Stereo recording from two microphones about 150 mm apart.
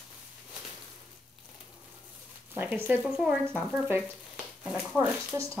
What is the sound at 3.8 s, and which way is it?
Frying, 5° right (ahead or behind).